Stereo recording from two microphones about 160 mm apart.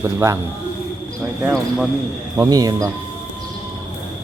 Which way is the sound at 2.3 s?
20° right (ahead or behind).